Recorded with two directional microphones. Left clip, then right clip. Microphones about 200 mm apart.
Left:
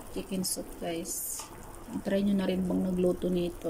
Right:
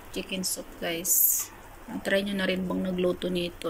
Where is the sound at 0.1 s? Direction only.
20° left (ahead or behind).